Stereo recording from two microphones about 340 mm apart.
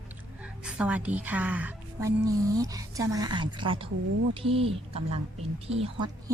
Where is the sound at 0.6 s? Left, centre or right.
Centre.